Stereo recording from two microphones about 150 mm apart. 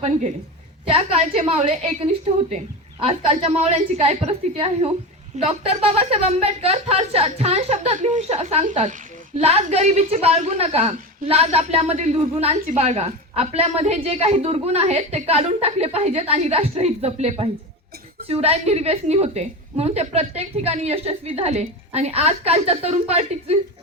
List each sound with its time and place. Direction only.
0.9 s a woman's voice: 40° right (ahead or behind)